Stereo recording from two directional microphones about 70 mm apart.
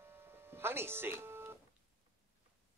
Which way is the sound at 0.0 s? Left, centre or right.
Right.